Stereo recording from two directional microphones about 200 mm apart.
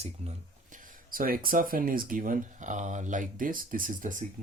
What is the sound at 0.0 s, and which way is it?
Speech, 30° right (ahead or behind).